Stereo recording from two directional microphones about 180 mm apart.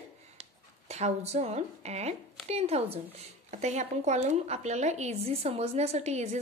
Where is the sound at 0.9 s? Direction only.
40° right (ahead or behind).